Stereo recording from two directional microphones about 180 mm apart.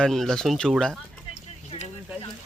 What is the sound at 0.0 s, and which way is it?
Speech, centre (ahead or behind).